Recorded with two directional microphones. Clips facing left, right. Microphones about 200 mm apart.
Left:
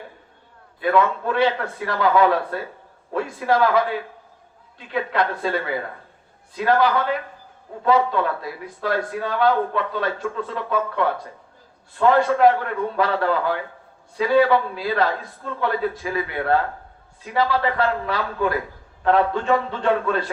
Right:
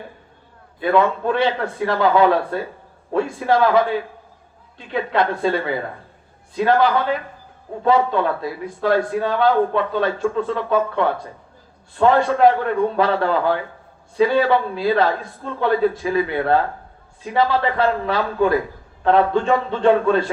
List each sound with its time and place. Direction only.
0.8 s a man's voice: 30° right (ahead or behind)